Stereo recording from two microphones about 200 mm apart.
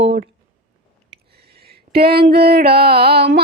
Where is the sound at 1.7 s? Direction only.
50° right (ahead or behind).